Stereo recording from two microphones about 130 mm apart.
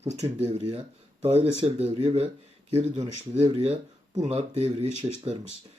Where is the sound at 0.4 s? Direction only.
50° right (ahead or behind).